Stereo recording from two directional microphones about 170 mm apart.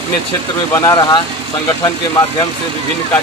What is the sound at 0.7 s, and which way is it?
Speech, 20° left (ahead or behind).